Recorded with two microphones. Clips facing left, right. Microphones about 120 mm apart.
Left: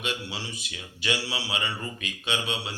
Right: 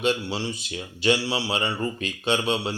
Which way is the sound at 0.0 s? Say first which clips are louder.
Right 9 dB; 30° right (ahead or behind).